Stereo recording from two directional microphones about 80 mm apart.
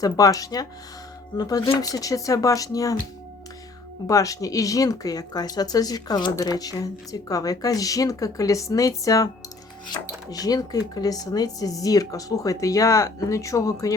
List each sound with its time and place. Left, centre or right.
0.0 s speech: left
4.0 s speech: left
6.3 s speech: left